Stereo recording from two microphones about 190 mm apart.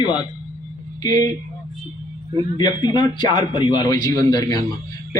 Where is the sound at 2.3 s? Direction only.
20° left (ahead or behind).